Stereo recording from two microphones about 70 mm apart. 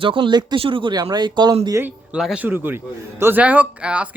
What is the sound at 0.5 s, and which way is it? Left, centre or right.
Speech, right.